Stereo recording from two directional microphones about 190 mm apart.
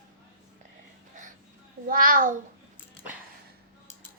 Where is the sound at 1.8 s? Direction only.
45° right (ahead or behind).